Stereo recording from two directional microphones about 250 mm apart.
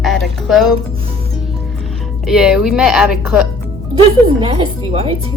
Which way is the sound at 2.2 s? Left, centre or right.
Centre.